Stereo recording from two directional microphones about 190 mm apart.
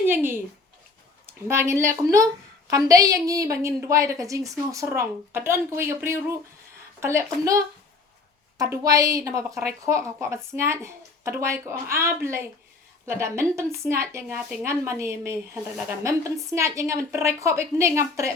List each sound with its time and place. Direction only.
0.0 s a woman's voice: 10° right (ahead or behind)